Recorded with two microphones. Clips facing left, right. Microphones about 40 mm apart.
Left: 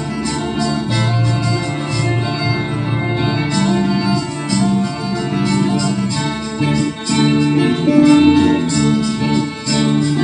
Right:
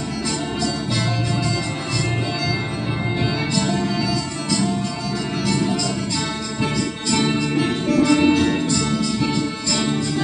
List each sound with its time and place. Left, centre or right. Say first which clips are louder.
3.5 s music: left 6 dB; left